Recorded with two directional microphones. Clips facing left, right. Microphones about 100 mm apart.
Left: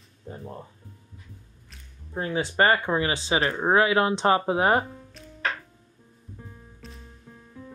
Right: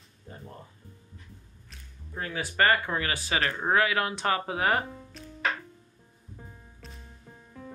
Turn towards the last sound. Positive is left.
turn(degrees=0)  # may be behind; listen again after turning